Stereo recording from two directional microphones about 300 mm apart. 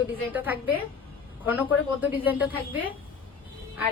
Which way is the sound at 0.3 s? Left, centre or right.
Centre.